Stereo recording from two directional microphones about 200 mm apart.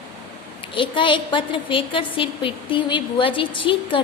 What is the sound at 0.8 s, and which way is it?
A woman's voice, 25° left (ahead or behind).